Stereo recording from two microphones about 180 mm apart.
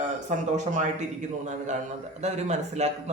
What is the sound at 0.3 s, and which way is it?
Speech, 40° right (ahead or behind).